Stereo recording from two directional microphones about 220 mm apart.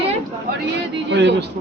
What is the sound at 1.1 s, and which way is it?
Speech, 55° right (ahead or behind).